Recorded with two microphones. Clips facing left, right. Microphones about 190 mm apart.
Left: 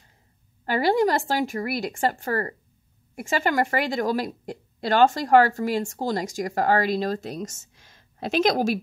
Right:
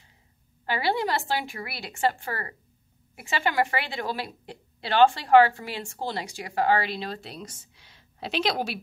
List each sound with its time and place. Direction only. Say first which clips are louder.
0.7 s a woman's voice: left 6 dB; 45° left (ahead or behind)